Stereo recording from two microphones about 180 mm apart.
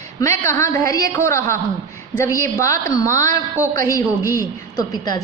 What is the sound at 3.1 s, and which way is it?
Speech, 45° right (ahead or behind).